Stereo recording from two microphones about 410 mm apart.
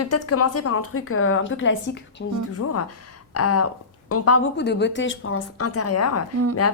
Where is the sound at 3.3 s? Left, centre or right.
Left.